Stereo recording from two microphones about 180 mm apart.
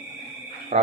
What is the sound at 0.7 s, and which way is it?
Speech, 35° right (ahead or behind).